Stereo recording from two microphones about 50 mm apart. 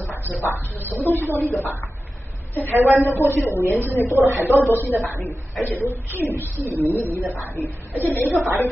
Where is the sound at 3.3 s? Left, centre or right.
Left.